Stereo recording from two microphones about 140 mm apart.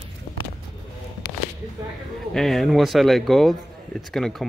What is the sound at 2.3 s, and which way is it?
Speech, centre (ahead or behind).